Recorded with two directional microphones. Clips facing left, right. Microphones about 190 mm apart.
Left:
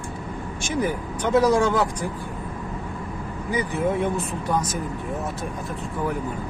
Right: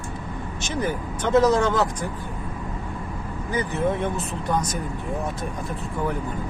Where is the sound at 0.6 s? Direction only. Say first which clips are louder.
Left 2 dB; 10° left (ahead or behind).